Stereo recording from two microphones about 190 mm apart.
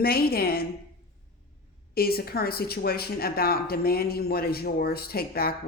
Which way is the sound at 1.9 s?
55° left (ahead or behind).